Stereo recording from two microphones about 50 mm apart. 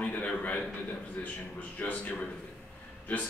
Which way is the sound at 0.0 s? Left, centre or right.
Left.